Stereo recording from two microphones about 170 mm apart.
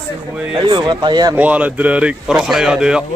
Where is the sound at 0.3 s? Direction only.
5° right (ahead or behind).